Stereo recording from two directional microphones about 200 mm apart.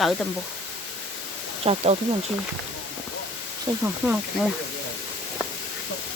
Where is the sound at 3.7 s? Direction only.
25° right (ahead or behind).